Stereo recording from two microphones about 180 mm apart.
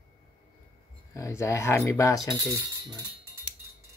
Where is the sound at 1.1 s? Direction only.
15° left (ahead or behind).